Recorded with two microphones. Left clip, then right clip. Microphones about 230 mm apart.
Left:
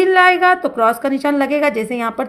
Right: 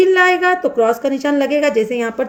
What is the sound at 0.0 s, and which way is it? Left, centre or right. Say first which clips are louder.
A woman's voice: left 1 dB; left.